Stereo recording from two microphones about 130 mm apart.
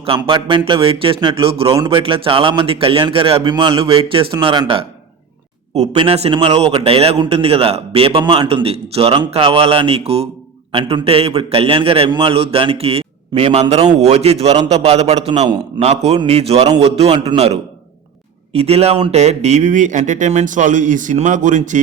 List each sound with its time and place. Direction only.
0.0 s a man's voice: 45° right (ahead or behind)
5.9 s a man's voice: 45° right (ahead or behind); by 21.8 s 75° right (ahead or behind)